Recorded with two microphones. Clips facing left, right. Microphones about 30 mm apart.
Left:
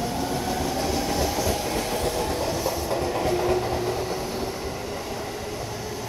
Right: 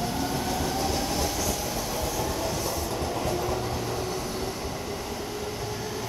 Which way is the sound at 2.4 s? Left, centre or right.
Centre.